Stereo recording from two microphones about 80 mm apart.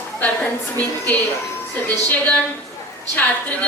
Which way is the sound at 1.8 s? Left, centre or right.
Centre.